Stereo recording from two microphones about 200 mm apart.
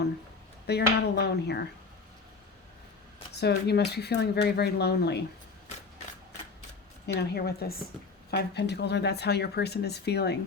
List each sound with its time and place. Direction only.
0.7 s speech: 55° left (ahead or behind)
3.3 s speech: 55° left (ahead or behind)
7.2 s a woman's voice: 50° left (ahead or behind)